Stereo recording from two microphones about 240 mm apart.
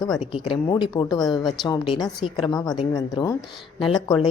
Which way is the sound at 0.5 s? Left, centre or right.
Centre.